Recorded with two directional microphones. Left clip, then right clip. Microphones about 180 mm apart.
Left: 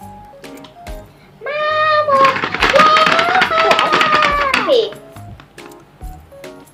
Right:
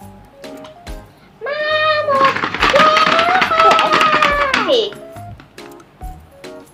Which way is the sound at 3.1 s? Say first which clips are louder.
Even; 25° left (ahead or behind).